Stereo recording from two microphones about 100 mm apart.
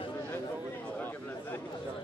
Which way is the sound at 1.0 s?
20° left (ahead or behind).